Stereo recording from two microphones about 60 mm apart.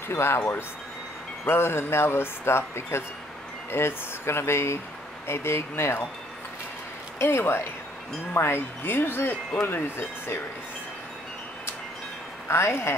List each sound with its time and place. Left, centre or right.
0.1 s speech: left
1.5 s speech: left
7.2 s speech: left
12.4 s speech: left